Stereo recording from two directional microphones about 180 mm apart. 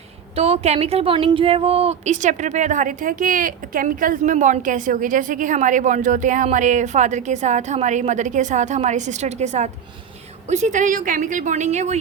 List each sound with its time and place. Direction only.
0.3 s a woman's voice: 35° right (ahead or behind)